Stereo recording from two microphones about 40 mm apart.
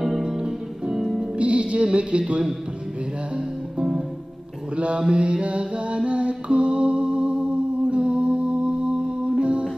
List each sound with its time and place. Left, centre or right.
0.0 s music: centre
1.4 s music: right
4.7 s mantra: right